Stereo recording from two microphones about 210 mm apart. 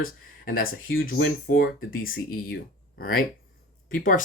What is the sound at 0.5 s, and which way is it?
Speech, 45° left (ahead or behind).